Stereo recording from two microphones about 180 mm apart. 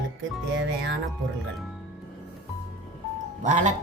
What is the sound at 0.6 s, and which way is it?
Music, 80° right.